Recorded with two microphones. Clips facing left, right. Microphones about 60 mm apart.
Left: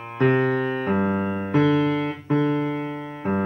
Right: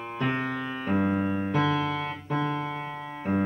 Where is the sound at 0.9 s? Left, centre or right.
Centre.